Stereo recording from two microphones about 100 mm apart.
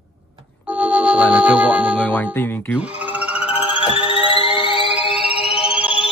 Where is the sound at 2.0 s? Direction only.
15° left (ahead or behind).